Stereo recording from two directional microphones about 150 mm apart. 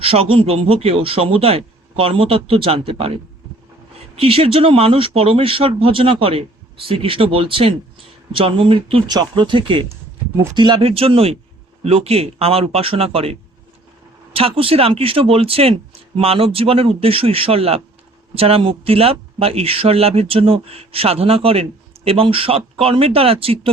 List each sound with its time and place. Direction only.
0.0 s speech: 40° right (ahead or behind)
4.1 s speech: 40° right (ahead or behind)
14.3 s speech: 40° right (ahead or behind)